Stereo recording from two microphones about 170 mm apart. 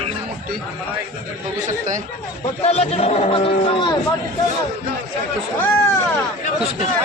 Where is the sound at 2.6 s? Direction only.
35° left (ahead or behind).